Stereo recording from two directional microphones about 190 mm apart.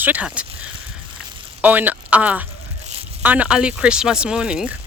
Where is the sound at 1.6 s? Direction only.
10° right (ahead or behind).